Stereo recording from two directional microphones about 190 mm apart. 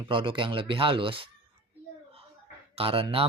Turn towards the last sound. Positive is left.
turn(degrees=-30)  # may be behind; listen again after turning